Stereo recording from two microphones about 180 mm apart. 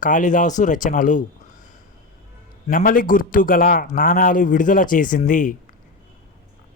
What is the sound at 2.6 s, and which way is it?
A man's voice, 50° left (ahead or behind).